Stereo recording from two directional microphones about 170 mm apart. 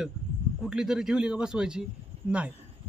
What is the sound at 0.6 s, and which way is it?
A man's voice, 5° right (ahead or behind).